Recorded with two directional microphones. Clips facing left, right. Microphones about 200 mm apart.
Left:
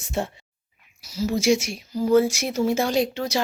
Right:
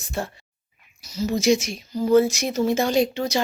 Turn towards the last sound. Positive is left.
turn(degrees=5)  # may be behind; listen again after turning